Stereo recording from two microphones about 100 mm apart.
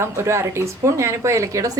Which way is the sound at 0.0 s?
25° right (ahead or behind).